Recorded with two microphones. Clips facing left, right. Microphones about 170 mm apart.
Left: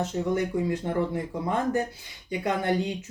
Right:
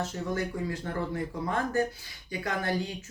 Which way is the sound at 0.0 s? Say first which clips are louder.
Left 5 dB; 20° left (ahead or behind).